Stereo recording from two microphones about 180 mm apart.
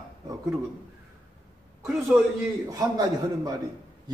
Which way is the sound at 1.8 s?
Centre (ahead or behind).